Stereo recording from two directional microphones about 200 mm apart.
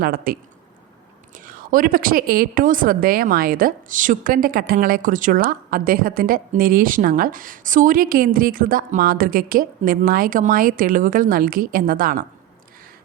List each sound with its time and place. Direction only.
0.0 s a woman's voice: 45° right (ahead or behind)
1.5 s a woman's voice: 45° right (ahead or behind)